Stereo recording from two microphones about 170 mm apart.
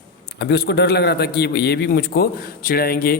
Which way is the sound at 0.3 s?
75° left (ahead or behind).